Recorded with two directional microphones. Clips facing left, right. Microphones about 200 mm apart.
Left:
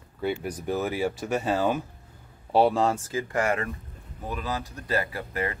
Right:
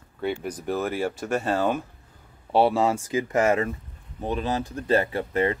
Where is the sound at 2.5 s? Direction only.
5° right (ahead or behind).